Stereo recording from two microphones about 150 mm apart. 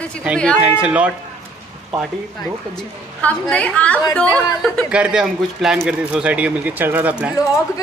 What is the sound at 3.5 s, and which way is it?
Speech, 10° left (ahead or behind).